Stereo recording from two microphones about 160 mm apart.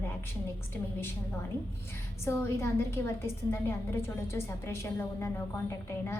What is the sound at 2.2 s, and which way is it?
Speech, 15° left (ahead or behind).